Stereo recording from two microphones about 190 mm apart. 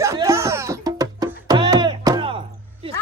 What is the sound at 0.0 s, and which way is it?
Music, 15° right (ahead or behind).